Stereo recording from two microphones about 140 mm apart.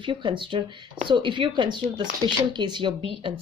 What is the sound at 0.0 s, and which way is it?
A woman's voice, 35° right (ahead or behind).